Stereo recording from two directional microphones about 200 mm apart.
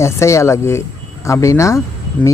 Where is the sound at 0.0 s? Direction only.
15° left (ahead or behind).